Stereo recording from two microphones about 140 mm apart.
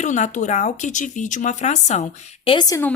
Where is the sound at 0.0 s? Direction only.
60° left (ahead or behind); by 2.6 s 40° left (ahead or behind).